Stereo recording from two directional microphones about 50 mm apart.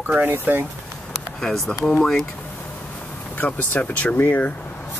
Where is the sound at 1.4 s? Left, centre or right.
Centre.